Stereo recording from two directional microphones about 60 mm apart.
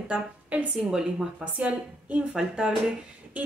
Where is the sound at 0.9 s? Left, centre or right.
Centre.